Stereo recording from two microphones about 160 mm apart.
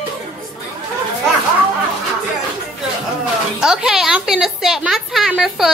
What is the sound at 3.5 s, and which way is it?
A woman's voice, 5° right (ahead or behind).